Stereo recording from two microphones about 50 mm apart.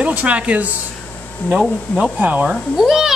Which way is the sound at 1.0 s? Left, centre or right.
Left.